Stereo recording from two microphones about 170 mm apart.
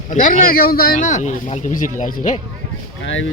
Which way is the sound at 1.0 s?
45° left (ahead or behind).